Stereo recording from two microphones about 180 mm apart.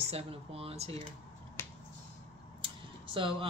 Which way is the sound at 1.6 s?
15° left (ahead or behind).